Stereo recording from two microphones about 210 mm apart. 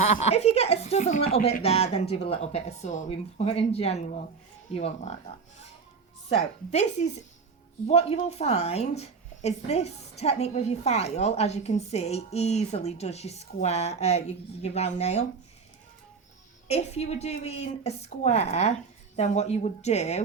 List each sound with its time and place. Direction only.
0.1 s a woman's voice: 30° left (ahead or behind)
6.2 s a woman's voice: 30° left (ahead or behind)
16.6 s a woman's voice: 30° left (ahead or behind)